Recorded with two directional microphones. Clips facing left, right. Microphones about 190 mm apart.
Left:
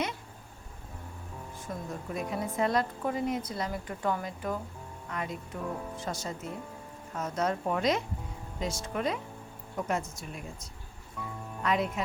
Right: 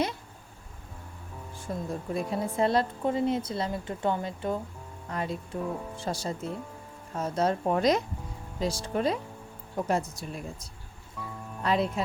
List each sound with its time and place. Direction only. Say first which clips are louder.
1.6 s a woman's voice: right 5 dB; 30° right (ahead or behind)